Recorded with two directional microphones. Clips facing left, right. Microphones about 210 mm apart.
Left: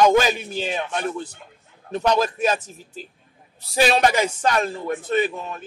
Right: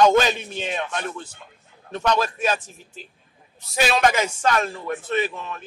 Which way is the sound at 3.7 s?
35° left (ahead or behind).